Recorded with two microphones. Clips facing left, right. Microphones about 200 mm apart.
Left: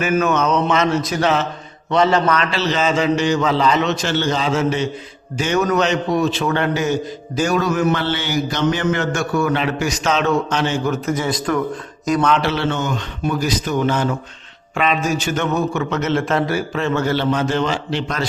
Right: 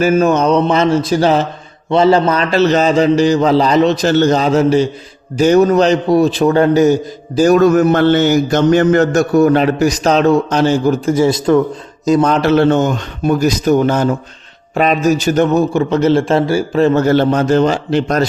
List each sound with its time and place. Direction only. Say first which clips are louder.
0.0 s a man's voice: right 6 dB; 30° right (ahead or behind)
1.9 s mantra: right 5 dB; 30° right (ahead or behind)
2.5 s a man's voice: right 8 dB; 45° right (ahead or behind); by 11.6 s 25° right (ahead or behind)
12.0 s mantra: right 6 dB; 25° right (ahead or behind)
12.3 s a man's voice: right 8 dB; 45° right (ahead or behind)